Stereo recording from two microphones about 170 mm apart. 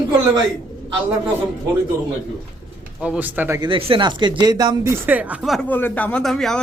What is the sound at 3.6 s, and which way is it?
Speech, 30° right (ahead or behind).